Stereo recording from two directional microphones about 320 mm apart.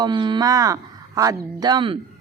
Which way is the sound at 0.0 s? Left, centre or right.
Centre.